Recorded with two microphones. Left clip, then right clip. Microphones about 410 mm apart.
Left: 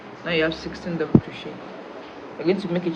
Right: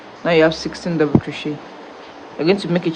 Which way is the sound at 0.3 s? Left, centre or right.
Centre.